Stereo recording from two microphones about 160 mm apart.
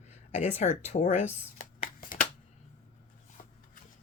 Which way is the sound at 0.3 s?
45° left (ahead or behind).